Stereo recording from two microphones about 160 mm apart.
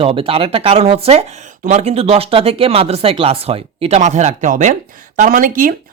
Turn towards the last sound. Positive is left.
turn(degrees=-60)  # may be behind; listen again after turning